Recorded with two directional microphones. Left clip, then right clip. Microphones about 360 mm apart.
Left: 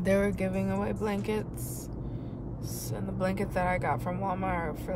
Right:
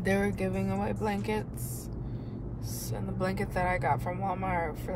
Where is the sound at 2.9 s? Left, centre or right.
Centre.